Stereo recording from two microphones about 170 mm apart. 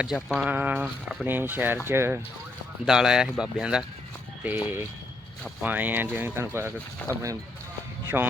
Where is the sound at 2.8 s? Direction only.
5° right (ahead or behind).